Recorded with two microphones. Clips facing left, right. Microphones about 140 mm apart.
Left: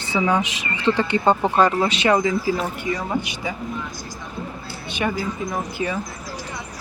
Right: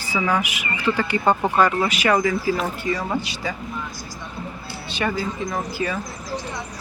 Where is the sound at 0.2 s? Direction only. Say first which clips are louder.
Left 2 dB; 15° left (ahead or behind).